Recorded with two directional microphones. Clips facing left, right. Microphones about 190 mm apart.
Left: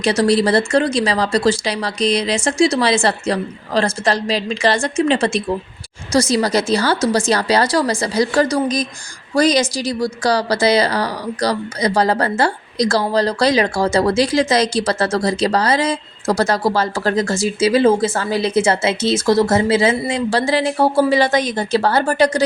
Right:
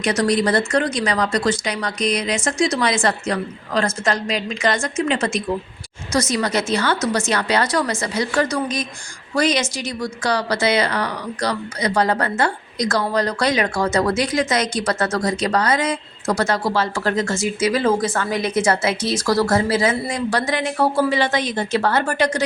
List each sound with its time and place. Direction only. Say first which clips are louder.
0.0 s a woman's voice: left 3 dB; 30° left (ahead or behind)